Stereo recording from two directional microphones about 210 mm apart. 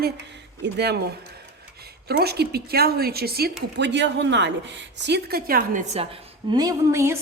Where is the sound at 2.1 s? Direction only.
50° right (ahead or behind).